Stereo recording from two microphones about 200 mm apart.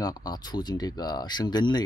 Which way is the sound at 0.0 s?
20° left (ahead or behind).